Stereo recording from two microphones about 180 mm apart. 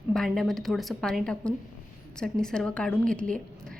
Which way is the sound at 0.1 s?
Centre (ahead or behind).